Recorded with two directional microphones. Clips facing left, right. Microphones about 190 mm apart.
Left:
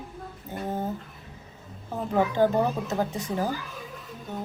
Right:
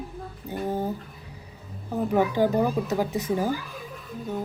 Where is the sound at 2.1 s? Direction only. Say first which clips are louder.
Even; 15° right (ahead or behind).